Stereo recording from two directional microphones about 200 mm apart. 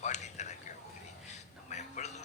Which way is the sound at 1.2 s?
35° left (ahead or behind).